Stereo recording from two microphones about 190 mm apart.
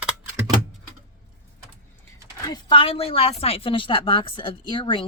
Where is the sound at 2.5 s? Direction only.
25° left (ahead or behind).